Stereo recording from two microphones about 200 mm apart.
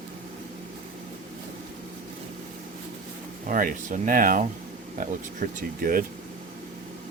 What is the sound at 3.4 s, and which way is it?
Speech, 45° right (ahead or behind).